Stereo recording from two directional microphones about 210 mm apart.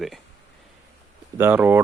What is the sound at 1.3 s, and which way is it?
Speech, 10° right (ahead or behind).